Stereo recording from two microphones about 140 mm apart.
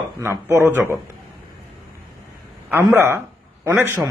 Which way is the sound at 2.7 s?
15° right (ahead or behind).